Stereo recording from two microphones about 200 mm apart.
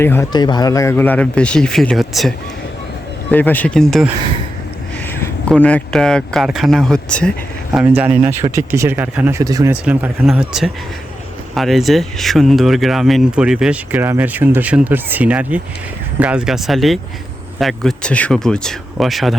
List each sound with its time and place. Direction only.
0.0 s speech: 10° left (ahead or behind)
7.7 s speech: 5° right (ahead or behind)
9.7 s speech: 5° right (ahead or behind)